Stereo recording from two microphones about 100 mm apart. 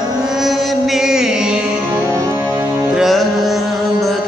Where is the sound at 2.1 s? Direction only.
30° right (ahead or behind).